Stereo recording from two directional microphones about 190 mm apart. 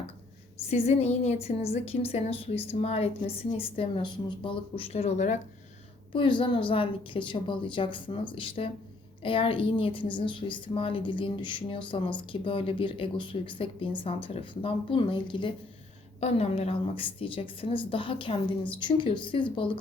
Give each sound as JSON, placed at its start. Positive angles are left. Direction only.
{"t": 0.7, "sound": "a woman's voice", "side_deg": 35}
{"t": 6.1, "sound": "a woman's voice", "side_deg": 25}